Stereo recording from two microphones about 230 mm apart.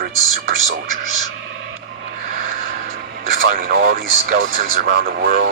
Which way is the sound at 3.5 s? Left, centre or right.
Right.